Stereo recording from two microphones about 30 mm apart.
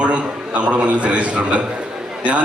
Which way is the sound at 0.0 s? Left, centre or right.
Right.